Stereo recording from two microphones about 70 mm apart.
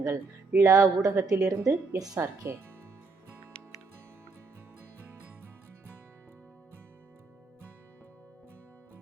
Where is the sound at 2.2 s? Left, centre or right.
Right.